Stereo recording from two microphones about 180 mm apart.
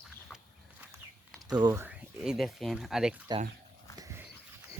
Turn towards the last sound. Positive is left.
turn(degrees=-15)  # may be behind; listen again after turning